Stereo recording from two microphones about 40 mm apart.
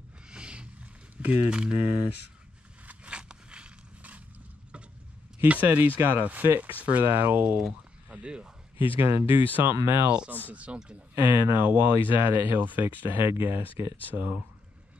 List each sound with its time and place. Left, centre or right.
0.3 s roaring cats: right
1.1 s a sound: right
1.5 s speech: right
2.9 s a sound: right
5.5 s speech: right
7.1 s speech: right
8.1 s speech: right
8.7 s speech: right
10.5 s speech: right
11.1 s speech: right
13.2 s speech: right